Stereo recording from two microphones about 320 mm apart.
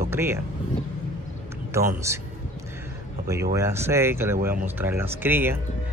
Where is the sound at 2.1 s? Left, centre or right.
Centre.